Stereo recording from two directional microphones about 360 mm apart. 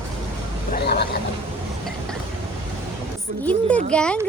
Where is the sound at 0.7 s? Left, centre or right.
Left.